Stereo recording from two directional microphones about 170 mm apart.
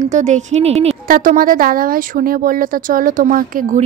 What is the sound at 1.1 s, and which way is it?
Speech, 55° right (ahead or behind).